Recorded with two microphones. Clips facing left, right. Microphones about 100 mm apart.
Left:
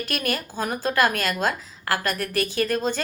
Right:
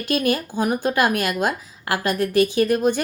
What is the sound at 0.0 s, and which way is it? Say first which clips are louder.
A woman's voice: right 6 dB; 20° right (ahead or behind).